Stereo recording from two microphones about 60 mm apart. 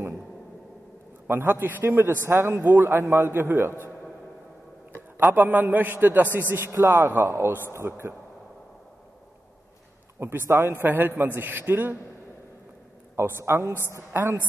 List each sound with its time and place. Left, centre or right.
1.2 s a man's voice: right
5.3 s a man's voice: right
10.1 s a man's voice: right
13.1 s a man's voice: right